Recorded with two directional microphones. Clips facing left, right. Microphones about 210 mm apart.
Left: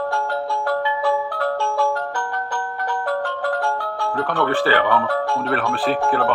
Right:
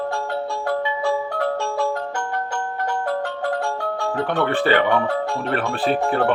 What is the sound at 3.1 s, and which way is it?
Music, 25° right (ahead or behind).